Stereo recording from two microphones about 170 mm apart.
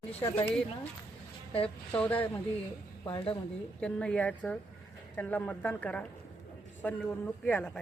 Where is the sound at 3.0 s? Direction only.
25° left (ahead or behind).